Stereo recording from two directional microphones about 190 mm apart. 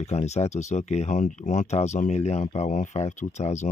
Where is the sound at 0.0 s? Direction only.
35° left (ahead or behind).